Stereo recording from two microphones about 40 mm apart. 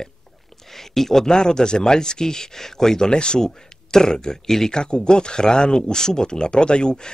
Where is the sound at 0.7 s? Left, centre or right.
Centre.